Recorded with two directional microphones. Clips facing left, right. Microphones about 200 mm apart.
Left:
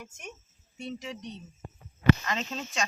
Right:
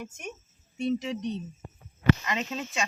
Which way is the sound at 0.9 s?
20° right (ahead or behind).